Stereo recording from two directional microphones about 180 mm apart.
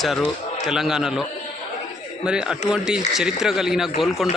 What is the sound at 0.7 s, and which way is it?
Speech, centre (ahead or behind).